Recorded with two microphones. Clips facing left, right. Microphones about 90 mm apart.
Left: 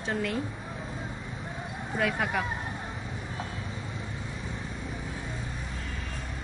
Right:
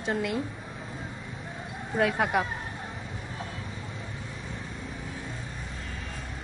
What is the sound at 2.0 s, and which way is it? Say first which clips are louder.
Speech: right 4 dB; 25° right (ahead or behind).